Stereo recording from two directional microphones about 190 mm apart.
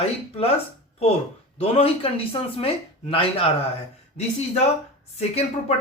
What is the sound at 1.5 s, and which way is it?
Speech, 30° left (ahead or behind).